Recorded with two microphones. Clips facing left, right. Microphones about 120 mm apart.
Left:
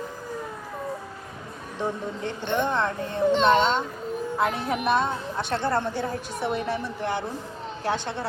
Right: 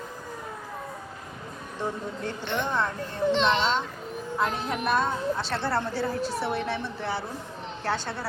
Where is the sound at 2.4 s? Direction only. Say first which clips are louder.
Left 4 dB; 50° left (ahead or behind).